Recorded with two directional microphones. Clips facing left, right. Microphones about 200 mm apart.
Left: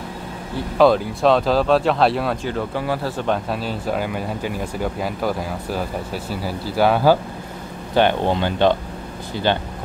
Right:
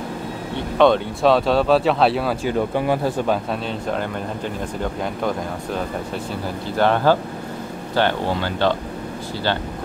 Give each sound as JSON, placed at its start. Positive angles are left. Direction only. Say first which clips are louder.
{"t": 0.6, "sound": "speech", "louder": "left 1 dB", "side_deg": 5}
{"t": 2.4, "sound": "speech", "louder": "right 3 dB", "side_deg": -20}
{"t": 3.3, "sound": "speech", "louder": "even", "side_deg": 0}